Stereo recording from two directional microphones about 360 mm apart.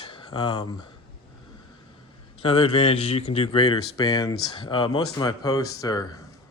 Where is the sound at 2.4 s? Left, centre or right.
Centre.